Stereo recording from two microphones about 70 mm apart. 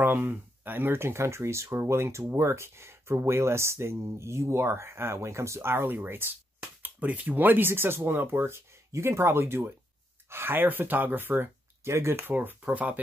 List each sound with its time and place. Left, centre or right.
0.0 s speech: right
11.9 s speech: right
12.3 s speech: right